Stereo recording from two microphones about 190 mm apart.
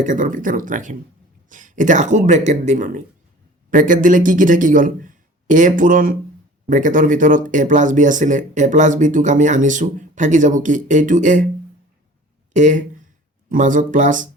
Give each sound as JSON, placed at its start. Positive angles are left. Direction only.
{"t": 0.0, "sound": "a man's voice", "side_deg": -45}
{"t": 12.5, "sound": "speech", "side_deg": -40}